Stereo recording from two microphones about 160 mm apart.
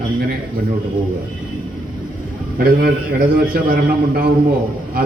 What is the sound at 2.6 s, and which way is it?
A man's voice, 70° right (ahead or behind).